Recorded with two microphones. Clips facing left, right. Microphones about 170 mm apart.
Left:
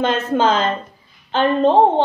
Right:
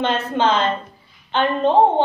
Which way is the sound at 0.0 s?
45° left (ahead or behind).